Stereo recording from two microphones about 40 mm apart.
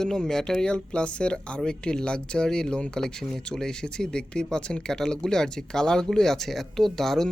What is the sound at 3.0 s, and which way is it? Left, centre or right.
Speech, centre.